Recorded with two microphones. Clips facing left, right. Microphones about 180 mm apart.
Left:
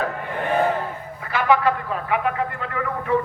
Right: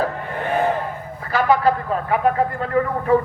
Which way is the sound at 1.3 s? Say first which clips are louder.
Right 2 dB; 40° right (ahead or behind).